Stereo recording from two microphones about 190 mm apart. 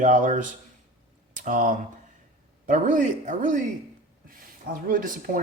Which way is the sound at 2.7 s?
40° right (ahead or behind).